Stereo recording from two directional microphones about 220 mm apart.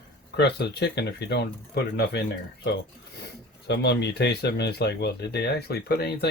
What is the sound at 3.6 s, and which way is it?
Speech, 50° left (ahead or behind).